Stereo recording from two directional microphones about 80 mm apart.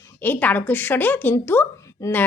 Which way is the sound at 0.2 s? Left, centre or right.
Left.